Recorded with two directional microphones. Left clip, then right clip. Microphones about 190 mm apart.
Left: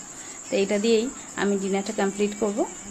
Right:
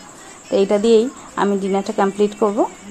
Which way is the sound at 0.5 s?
25° right (ahead or behind).